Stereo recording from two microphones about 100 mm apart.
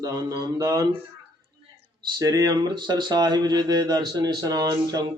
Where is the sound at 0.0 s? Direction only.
40° right (ahead or behind).